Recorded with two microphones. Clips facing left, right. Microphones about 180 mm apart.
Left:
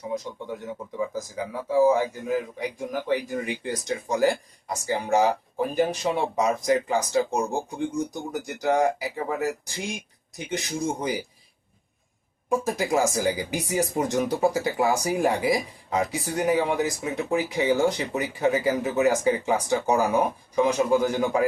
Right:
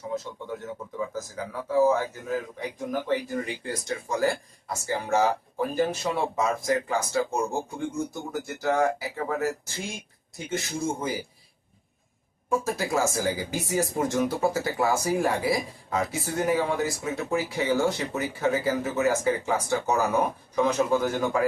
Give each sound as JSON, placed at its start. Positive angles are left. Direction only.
{"t": 0.6, "sound": "speech", "side_deg": 15}
{"t": 12.5, "sound": "speech", "side_deg": 15}